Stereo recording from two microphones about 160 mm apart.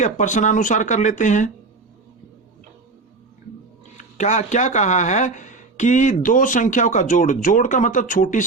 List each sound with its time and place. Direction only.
0.0 s speech: 50° left (ahead or behind)
3.9 s speech: 45° left (ahead or behind)